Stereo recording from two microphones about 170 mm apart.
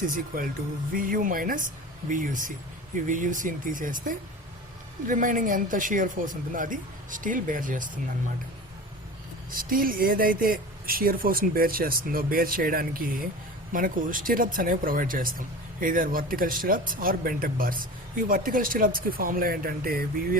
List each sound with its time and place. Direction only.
0.1 s a woman's voice: 55° right (ahead or behind)
9.6 s speech: 55° right (ahead or behind)